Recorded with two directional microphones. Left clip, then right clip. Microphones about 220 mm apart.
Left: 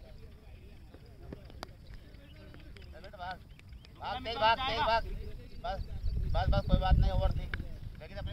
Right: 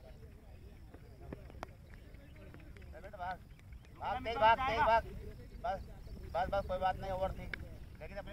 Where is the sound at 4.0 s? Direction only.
5° left (ahead or behind).